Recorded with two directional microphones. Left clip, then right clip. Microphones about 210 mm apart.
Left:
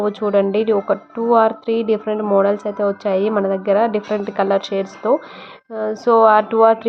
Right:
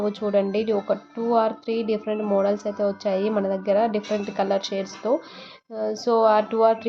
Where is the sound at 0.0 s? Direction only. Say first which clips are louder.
Left 6 dB; 20° left (ahead or behind).